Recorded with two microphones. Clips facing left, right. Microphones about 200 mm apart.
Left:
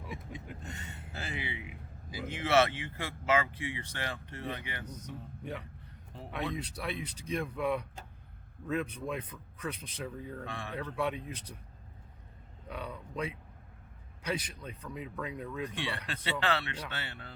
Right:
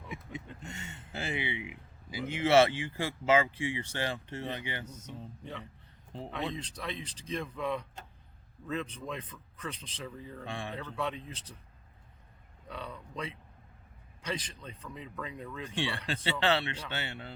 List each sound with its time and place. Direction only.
0.1 s a sound: 25° right (ahead or behind)
1.7 s speech: 25° right (ahead or behind)
6.1 s speech: 25° right (ahead or behind)
6.6 s a man's voice: 10° left (ahead or behind)
10.4 s speech: 30° right (ahead or behind)
10.8 s a man's voice: 10° left (ahead or behind)
12.6 s a man's voice: 10° left (ahead or behind)
15.6 s speech: 30° right (ahead or behind)